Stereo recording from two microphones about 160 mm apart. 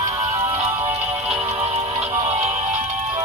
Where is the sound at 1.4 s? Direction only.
40° right (ahead or behind).